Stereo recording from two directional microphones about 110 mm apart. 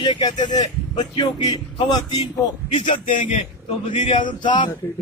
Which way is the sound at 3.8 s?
50° left (ahead or behind).